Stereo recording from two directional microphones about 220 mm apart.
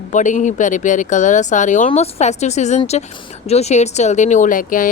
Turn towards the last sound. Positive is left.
turn(degrees=40)  # may be behind; listen again after turning